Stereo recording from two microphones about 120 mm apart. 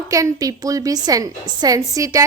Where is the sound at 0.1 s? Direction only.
30° right (ahead or behind).